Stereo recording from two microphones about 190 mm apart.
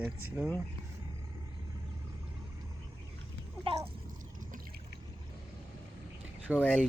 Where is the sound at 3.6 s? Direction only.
30° right (ahead or behind).